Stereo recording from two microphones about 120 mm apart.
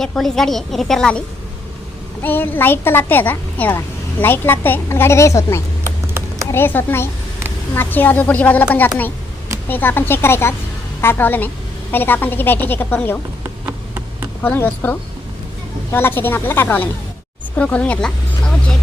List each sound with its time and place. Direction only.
0.0 s a woman's voice: 5° left (ahead or behind)
2.2 s a woman's voice: 15° left (ahead or behind)
5.8 s a sound: 20° right (ahead or behind)
6.5 s a woman's voice: 20° left (ahead or behind)
9.6 s a woman's voice: 15° left (ahead or behind)
14.4 s a woman's voice: 15° left (ahead or behind)